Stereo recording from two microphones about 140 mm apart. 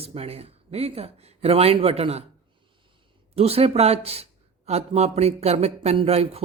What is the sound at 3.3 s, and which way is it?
Speech, 45° right (ahead or behind).